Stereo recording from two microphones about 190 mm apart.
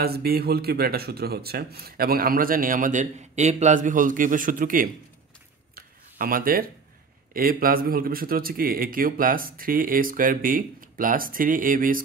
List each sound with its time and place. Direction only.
0.0 s speech: 55° right (ahead or behind)
5.8 s a sound: 50° right (ahead or behind)
7.3 s speech: 50° right (ahead or behind)